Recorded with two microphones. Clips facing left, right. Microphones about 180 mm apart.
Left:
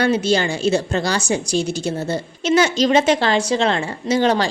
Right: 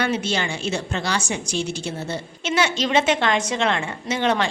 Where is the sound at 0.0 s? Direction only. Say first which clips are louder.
Left 6 dB; 35° left (ahead or behind).